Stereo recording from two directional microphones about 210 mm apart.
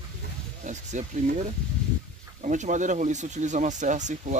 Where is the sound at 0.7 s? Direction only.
35° right (ahead or behind).